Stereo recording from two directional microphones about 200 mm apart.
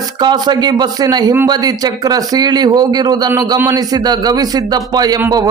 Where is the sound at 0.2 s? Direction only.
20° right (ahead or behind).